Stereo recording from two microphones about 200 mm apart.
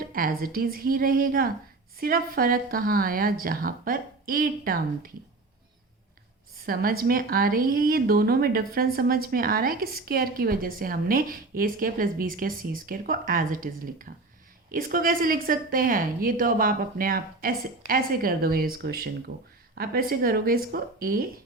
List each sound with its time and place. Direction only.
0.0 s speech: 45° right (ahead or behind)
6.7 s speech: 45° right (ahead or behind)